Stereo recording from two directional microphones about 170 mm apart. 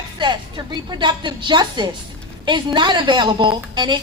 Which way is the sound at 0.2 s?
25° right (ahead or behind).